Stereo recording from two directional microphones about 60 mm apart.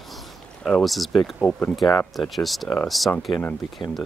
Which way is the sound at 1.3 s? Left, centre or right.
Centre.